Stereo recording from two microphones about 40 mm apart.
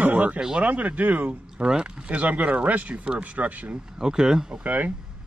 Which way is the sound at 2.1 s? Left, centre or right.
Right.